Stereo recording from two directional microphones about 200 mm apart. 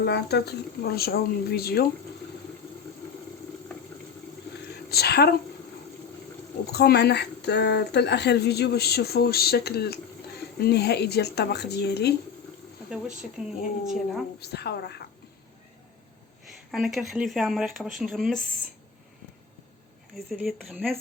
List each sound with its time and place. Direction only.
0.0 s speech: 55° left (ahead or behind)
4.9 s speech: 55° left (ahead or behind)
6.7 s speech: 55° left (ahead or behind)
13.4 s speech: 5° right (ahead or behind)
14.3 s speech: 55° left (ahead or behind)
16.7 s speech: centre (ahead or behind)
20.1 s speech: centre (ahead or behind)